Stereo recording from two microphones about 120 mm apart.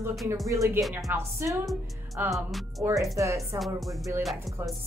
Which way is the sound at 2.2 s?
15° right (ahead or behind).